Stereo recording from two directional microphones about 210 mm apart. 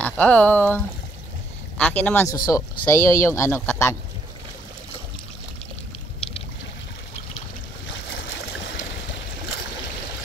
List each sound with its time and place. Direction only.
0.0 s speech: 5° left (ahead or behind)
8.1 s stream: 60° left (ahead or behind)